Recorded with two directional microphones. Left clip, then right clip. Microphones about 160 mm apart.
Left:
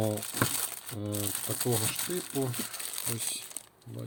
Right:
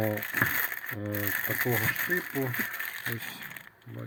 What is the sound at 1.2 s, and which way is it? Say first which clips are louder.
Speech: right 7 dB; centre (ahead or behind).